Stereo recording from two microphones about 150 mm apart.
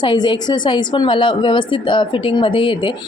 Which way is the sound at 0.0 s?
30° left (ahead or behind).